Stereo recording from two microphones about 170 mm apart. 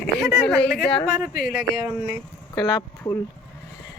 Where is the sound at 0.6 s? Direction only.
80° left.